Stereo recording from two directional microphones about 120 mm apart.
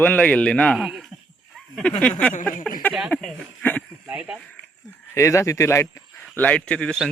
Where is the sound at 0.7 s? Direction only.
5° right (ahead or behind).